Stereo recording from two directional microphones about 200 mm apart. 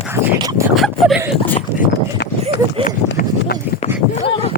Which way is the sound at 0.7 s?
Centre (ahead or behind).